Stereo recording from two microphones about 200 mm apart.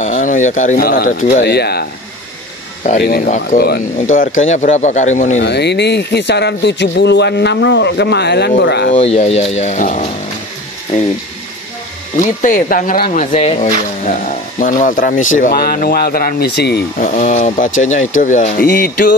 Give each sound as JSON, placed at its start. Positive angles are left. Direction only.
{"t": 0.0, "sound": "speech", "side_deg": 40}
{"t": 1.4, "sound": "speech", "side_deg": 55}
{"t": 5.4, "sound": "speech", "side_deg": 60}
{"t": 8.9, "sound": "speech", "side_deg": 35}
{"t": 12.2, "sound": "speech", "side_deg": 40}
{"t": 17.0, "sound": "speech", "side_deg": 40}